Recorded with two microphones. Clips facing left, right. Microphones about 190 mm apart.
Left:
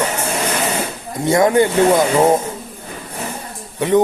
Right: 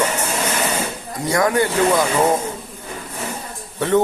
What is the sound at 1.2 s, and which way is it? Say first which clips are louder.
Speech: left 5 dB; 25° left (ahead or behind).